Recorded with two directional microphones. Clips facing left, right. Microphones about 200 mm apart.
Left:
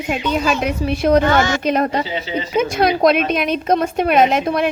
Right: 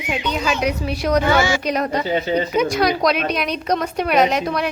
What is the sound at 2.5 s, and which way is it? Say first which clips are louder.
Speech: left 5 dB; 25° left (ahead or behind).